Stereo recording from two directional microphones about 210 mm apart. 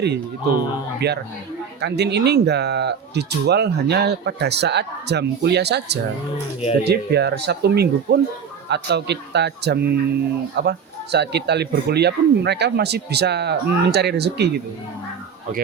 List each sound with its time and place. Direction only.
0.9 s speech: 50° right (ahead or behind)